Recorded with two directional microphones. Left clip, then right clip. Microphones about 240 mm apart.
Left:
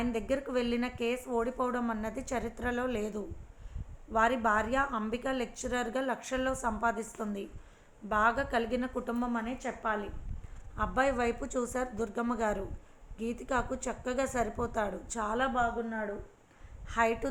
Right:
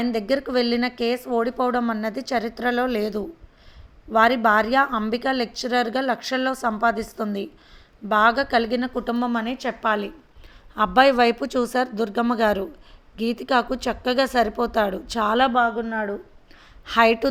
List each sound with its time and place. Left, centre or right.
0.1 s speech: right
16.9 s speech: right